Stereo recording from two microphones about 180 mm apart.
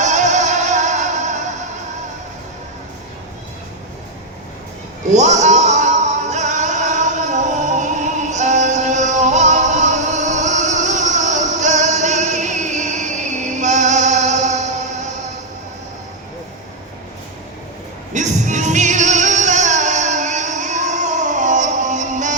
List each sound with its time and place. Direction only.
0.0 s music: 40° right (ahead or behind)
5.1 s music: 40° right (ahead or behind)
18.1 s music: 40° right (ahead or behind)